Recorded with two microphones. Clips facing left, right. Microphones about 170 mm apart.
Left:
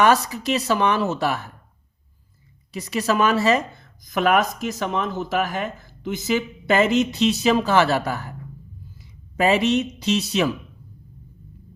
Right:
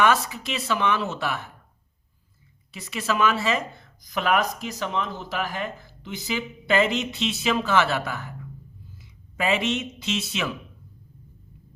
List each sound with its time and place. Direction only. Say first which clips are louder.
0.0 s speech: left 4 dB; 40° left (ahead or behind)
2.7 s speech: left 5 dB; 40° left (ahead or behind)